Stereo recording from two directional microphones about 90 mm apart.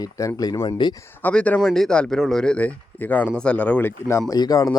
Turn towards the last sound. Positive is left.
turn(degrees=45)  # may be behind; listen again after turning